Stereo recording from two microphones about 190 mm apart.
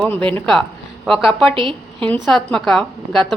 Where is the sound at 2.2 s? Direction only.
Centre (ahead or behind).